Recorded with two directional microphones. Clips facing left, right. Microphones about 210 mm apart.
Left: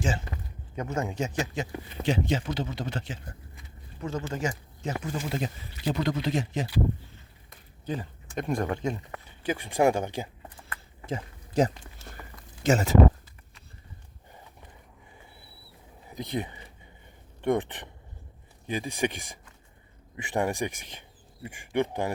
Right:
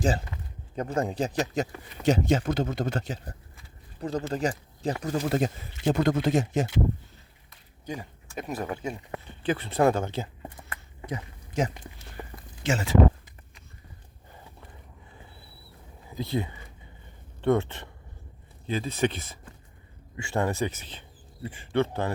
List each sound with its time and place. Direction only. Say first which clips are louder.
0.0 s speech: right 4 dB; 35° right (ahead or behind)
7.9 s speech: left 3 dB; 10° right (ahead or behind)
9.4 s speech: right 1 dB; 10° left (ahead or behind)
11.0 s a sound: left 1 dB; 30° left (ahead or behind)
12.2 s a sound: right 9 dB; 30° right (ahead or behind)
12.6 s speech: left 3 dB; 40° left (ahead or behind)
16.0 s speech: right 2 dB; 20° left (ahead or behind)